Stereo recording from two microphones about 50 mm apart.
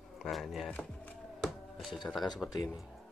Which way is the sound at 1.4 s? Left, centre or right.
Centre.